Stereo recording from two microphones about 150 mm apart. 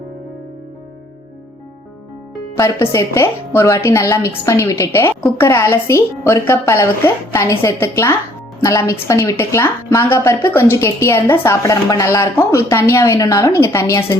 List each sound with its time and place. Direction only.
2.6 s a woman's voice: 20° left (ahead or behind)